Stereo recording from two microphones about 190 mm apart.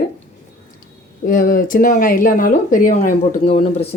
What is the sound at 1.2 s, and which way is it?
Speech, 45° left (ahead or behind).